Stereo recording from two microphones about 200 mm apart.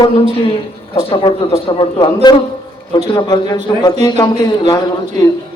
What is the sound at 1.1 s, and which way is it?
A man's voice, 25° left (ahead or behind).